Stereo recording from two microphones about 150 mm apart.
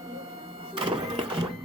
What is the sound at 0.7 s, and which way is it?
Printer, 35° right (ahead or behind).